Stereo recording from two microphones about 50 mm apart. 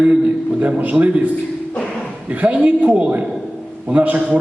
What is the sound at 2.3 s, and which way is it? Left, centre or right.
A man's voice, right.